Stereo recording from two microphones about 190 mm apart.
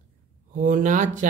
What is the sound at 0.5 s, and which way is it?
Speech, 45° right (ahead or behind).